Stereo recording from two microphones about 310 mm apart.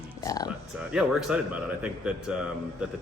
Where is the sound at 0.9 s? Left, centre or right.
Centre.